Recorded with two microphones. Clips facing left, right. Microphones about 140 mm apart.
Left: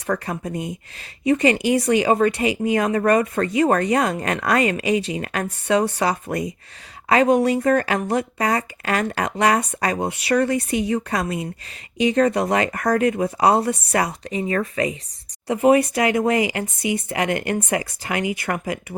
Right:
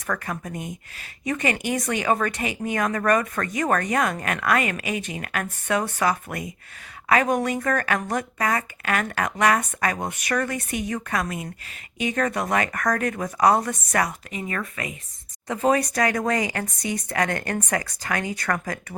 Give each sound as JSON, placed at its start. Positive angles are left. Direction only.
{"t": 0.1, "sound": "speech", "side_deg": 35}
{"t": 1.8, "sound": "speech", "side_deg": 30}
{"t": 15.4, "sound": "speech", "side_deg": 15}